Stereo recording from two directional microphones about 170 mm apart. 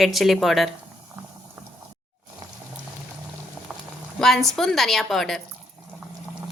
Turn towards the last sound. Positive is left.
turn(degrees=0)  # may be behind; listen again after turning